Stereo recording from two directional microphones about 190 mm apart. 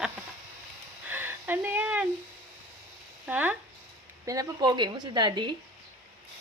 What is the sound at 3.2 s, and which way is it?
Speech, 10° right (ahead or behind).